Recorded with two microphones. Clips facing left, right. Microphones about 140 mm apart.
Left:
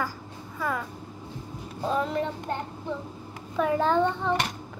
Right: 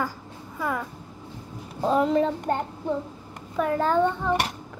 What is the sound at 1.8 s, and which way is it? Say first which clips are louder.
Speech: right 6 dB; 20° right (ahead or behind).